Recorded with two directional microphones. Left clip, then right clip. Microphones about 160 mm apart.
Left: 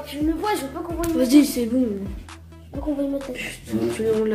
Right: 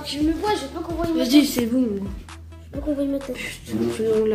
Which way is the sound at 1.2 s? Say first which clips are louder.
Left 1 dB; 25° left (ahead or behind).